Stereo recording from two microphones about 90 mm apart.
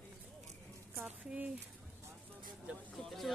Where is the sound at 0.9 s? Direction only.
20° right (ahead or behind).